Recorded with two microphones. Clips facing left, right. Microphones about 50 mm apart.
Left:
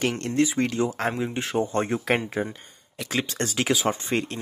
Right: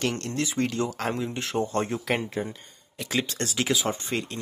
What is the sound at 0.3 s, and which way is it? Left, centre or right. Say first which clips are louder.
Speech: left 4 dB; centre.